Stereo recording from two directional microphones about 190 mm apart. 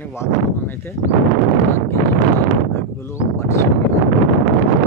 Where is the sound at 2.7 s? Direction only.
15° left (ahead or behind).